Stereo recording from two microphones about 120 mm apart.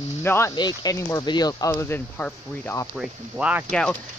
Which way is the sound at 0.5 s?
35° left (ahead or behind).